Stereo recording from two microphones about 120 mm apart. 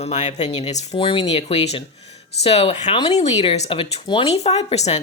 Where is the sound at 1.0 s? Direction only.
45° left (ahead or behind); by 5.0 s 65° left (ahead or behind).